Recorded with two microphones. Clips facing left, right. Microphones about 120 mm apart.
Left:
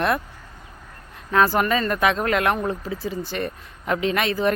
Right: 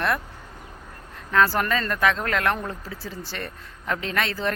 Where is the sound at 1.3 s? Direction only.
15° left (ahead or behind).